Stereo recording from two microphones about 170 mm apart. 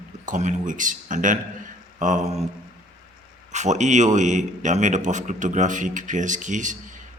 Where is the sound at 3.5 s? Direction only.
45° right (ahead or behind).